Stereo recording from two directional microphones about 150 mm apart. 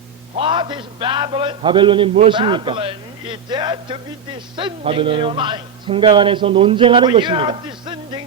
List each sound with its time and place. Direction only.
0.3 s a man's voice: 35° right (ahead or behind)